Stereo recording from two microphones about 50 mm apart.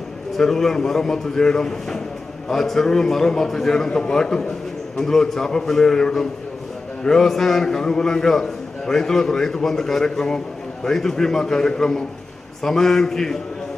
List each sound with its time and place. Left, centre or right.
0.4 s a man's voice: centre